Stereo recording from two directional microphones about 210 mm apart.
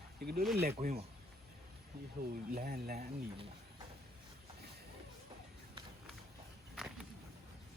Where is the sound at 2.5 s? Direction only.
45° right (ahead or behind).